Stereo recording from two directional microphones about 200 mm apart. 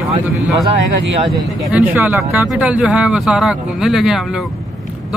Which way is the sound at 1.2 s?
5° right (ahead or behind).